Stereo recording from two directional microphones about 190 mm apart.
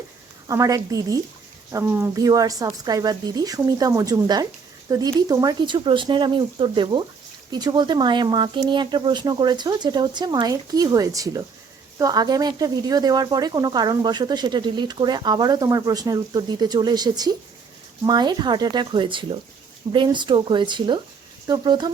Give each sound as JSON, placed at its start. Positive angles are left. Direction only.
{"t": 0.4, "sound": "a woman's voice", "side_deg": -15}